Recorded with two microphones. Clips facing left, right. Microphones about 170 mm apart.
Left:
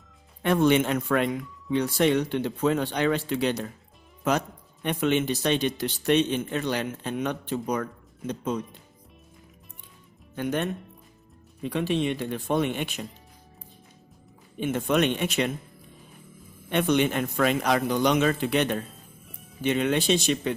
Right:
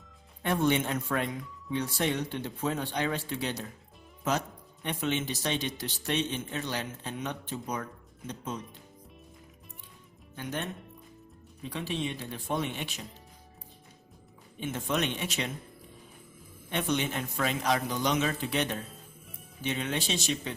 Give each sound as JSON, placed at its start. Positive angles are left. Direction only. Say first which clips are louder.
{"t": 0.4, "sound": "speech", "louder": "left 6 dB", "side_deg": 90}
{"t": 10.3, "sound": "speech", "louder": "left 8 dB", "side_deg": 60}
{"t": 14.6, "sound": "speech", "louder": "left 7 dB", "side_deg": 60}
{"t": 16.6, "sound": "speech", "louder": "left 8 dB", "side_deg": 65}